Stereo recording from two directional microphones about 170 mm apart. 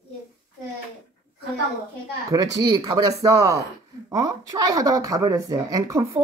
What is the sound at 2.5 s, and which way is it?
Speech, 25° right (ahead or behind).